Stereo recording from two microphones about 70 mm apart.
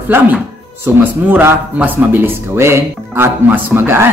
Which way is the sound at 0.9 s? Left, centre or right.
Right.